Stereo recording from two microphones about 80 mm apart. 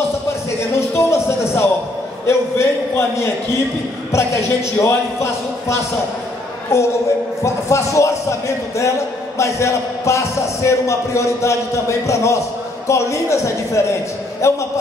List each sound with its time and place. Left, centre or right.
0.7 s music: left
2.2 s speech: left
4.1 s speech: left